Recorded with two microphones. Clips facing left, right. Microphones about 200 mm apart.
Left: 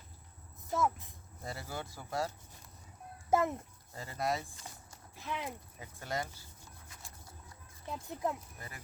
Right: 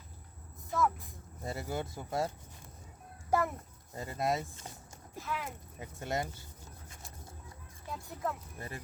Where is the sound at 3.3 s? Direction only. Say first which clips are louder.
Left 1 dB; 20° left (ahead or behind).